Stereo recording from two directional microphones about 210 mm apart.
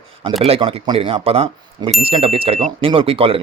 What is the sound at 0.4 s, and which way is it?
Speech, 25° right (ahead or behind).